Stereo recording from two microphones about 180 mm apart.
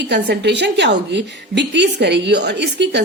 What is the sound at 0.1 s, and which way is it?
A woman's voice, 70° right (ahead or behind).